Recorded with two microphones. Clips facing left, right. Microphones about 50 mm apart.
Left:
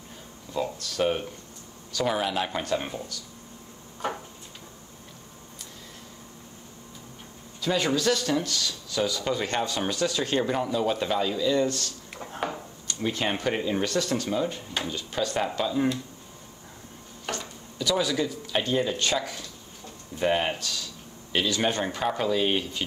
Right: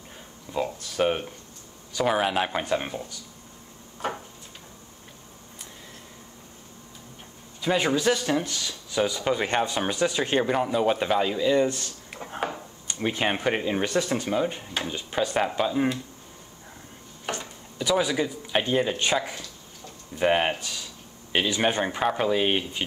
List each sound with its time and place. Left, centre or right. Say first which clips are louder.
0.5 s a man's voice: right 1 dB; centre
7.6 s a man's voice: right 2 dB; right
12.8 s a man's voice: right 2 dB; right
17.3 s a man's voice: right 1 dB; right